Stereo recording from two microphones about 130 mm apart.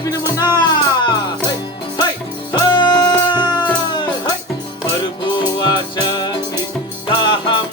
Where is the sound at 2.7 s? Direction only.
35° left (ahead or behind).